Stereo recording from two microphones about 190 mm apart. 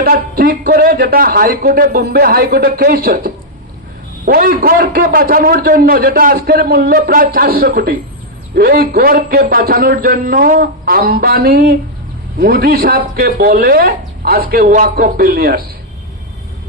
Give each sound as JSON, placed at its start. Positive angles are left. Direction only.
{"t": 0.0, "sound": "a man's voice", "side_deg": -50}